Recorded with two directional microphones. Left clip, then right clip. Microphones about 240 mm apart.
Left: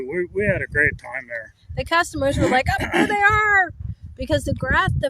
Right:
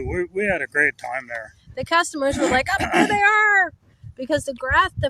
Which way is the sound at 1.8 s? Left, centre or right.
Centre.